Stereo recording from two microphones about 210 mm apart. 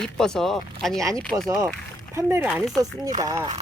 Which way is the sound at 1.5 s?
15° right (ahead or behind).